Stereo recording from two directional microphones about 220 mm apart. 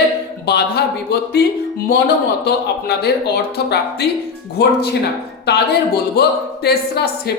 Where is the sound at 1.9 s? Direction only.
45° left (ahead or behind).